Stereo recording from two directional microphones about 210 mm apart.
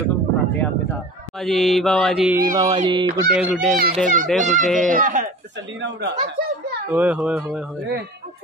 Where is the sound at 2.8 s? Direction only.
20° right (ahead or behind).